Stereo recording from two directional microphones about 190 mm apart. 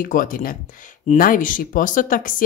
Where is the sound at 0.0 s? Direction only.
45° left (ahead or behind).